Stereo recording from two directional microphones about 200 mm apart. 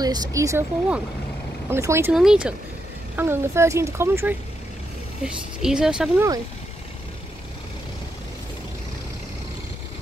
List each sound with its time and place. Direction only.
0.0 s a woman's voice: 20° right (ahead or behind); by 6.2 s 5° right (ahead or behind)